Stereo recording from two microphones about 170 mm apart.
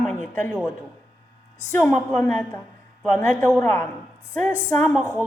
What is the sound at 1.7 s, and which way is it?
A woman's voice, 10° left (ahead or behind).